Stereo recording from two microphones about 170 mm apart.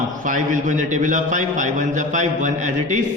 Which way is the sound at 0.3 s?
50° right (ahead or behind).